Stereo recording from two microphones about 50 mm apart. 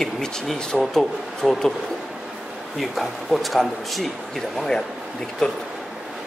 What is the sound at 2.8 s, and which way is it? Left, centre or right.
A man's voice, centre.